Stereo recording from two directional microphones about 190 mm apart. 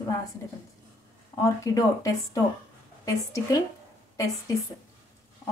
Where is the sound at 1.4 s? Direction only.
15° left (ahead or behind).